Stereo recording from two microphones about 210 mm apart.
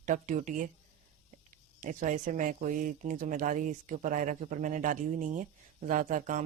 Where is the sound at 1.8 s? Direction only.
40° right (ahead or behind).